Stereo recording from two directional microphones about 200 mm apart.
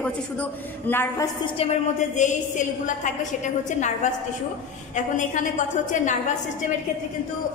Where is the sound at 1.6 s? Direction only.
35° left (ahead or behind).